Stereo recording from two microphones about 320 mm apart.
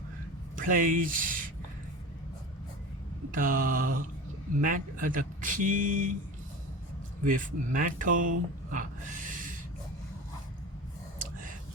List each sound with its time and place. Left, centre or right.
0.5 s speech: right
3.3 s speech: right
7.3 s speech: right
8.7 s a sound: right
11.2 s whispering: right